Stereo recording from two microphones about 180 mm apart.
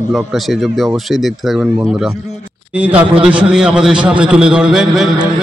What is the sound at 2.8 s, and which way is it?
A man's voice, 10° right (ahead or behind).